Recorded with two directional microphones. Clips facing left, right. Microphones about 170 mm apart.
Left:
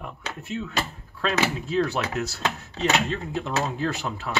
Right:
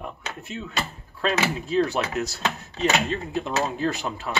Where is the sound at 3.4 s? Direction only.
15° right (ahead or behind).